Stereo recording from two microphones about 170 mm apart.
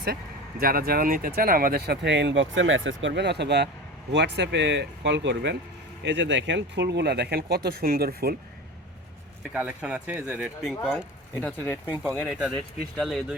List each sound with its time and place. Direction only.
0.6 s speech: 60° right (ahead or behind)
9.5 s speech: 5° right (ahead or behind)
11.4 s speech: 10° left (ahead or behind)